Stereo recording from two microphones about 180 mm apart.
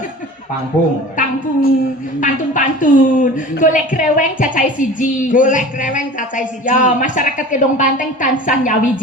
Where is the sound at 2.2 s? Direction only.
45° left (ahead or behind).